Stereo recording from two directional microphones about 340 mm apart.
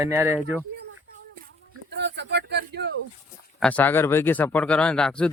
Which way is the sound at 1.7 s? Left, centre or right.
Right.